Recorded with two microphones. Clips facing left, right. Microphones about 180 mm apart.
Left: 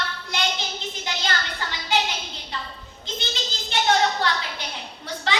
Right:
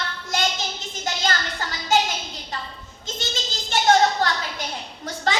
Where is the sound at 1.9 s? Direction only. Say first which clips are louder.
Right 4 dB; 45° right (ahead or behind).